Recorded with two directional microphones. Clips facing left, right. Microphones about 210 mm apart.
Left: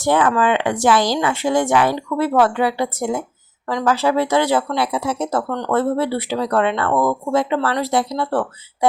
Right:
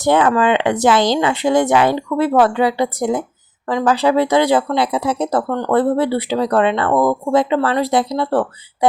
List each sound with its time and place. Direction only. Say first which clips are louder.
0.0 s speech: right 2 dB; 20° right (ahead or behind)